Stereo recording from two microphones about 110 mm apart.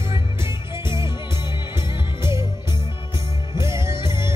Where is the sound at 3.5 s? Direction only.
25° right (ahead or behind).